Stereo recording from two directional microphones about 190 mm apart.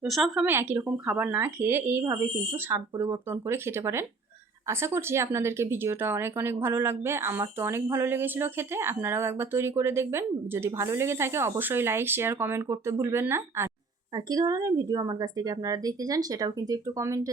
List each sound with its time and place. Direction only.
0.0 s speech: centre (ahead or behind); by 17.2 s 15° right (ahead or behind)